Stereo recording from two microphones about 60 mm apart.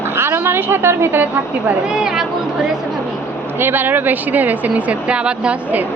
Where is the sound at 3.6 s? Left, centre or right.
Right.